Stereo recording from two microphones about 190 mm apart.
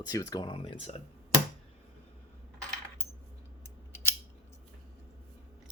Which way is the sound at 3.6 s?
10° left (ahead or behind).